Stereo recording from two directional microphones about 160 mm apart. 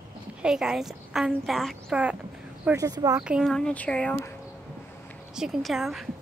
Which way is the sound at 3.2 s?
5° right (ahead or behind).